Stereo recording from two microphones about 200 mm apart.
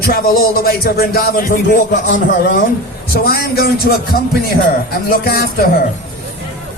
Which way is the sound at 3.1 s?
50° left (ahead or behind).